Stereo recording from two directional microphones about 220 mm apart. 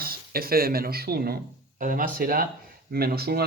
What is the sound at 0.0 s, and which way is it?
Speech, 45° right (ahead or behind).